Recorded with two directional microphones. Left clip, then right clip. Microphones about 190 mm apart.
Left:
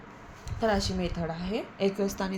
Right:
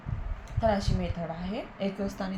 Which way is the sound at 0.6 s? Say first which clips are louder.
Even; 60° left (ahead or behind).